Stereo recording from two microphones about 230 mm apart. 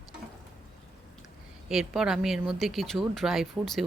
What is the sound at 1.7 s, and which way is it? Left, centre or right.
Speech, centre.